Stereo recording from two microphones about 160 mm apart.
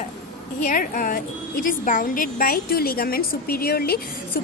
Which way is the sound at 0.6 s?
60° left (ahead or behind).